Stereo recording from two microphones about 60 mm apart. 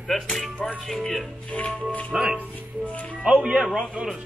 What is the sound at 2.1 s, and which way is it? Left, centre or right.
Speech, centre.